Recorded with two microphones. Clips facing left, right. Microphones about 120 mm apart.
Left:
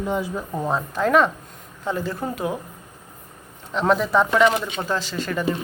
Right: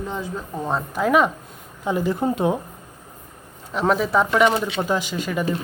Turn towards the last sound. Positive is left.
turn(degrees=-10)  # may be behind; listen again after turning